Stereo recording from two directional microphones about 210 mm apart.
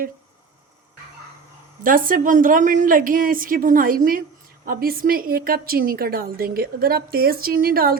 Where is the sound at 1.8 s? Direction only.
40° right (ahead or behind).